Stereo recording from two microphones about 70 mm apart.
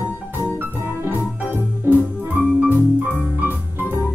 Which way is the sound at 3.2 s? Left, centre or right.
Right.